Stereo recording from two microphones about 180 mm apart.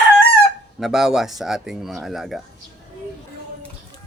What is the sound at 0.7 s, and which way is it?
Speech, centre (ahead or behind).